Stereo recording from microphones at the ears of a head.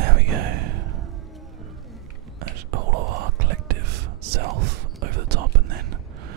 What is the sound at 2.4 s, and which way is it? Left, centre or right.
Whispering, right.